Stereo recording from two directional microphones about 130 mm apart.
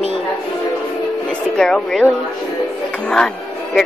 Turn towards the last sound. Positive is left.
turn(degrees=5)  # may be behind; listen again after turning